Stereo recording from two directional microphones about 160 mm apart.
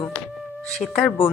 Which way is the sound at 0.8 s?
Centre (ahead or behind).